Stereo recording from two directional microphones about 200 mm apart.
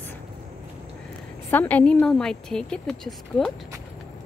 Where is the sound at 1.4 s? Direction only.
10° left (ahead or behind).